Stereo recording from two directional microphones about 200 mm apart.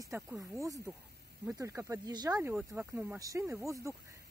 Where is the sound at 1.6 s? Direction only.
15° right (ahead or behind).